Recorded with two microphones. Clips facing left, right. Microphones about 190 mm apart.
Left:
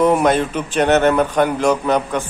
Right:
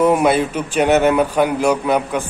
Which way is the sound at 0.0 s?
10° right (ahead or behind).